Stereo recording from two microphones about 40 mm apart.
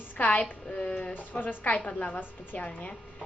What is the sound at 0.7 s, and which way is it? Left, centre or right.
Speech, left.